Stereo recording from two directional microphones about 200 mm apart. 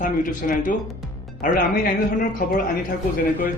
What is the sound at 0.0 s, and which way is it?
Speech, 40° left (ahead or behind).